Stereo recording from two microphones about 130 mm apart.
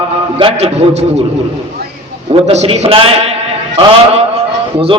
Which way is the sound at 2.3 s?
55° right (ahead or behind).